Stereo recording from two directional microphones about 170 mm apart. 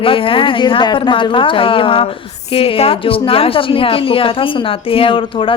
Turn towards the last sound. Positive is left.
turn(degrees=30)  # may be behind; listen again after turning